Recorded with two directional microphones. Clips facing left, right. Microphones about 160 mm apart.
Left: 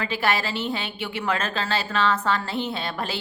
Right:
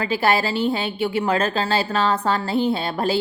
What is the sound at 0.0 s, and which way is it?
A woman's voice, 35° right (ahead or behind).